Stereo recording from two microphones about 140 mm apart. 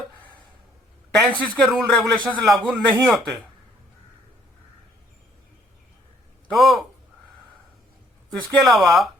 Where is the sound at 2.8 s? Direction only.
10° right (ahead or behind).